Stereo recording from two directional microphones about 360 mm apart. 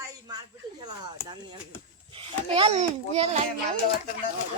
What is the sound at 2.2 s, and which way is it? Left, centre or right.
A child's voice, centre.